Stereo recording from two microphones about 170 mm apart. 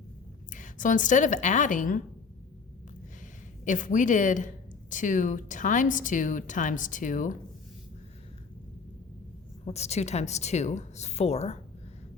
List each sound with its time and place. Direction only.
0.5 s a woman's voice: 50° left (ahead or behind)
3.6 s a woman's voice: 50° left (ahead or behind)
9.6 s speech: 40° left (ahead or behind)